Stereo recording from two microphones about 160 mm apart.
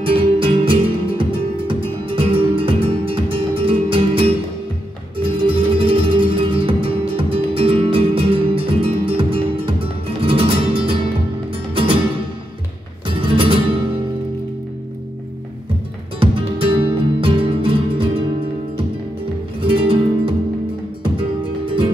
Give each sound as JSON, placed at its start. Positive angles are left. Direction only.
{"t": 0.0, "sound": "music", "side_deg": -35}
{"t": 13.0, "sound": "music", "side_deg": -35}
{"t": 16.2, "sound": "music", "side_deg": -35}
{"t": 19.6, "sound": "music", "side_deg": -35}